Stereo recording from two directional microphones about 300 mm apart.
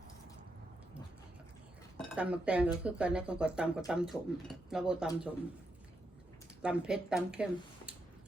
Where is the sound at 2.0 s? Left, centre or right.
Centre.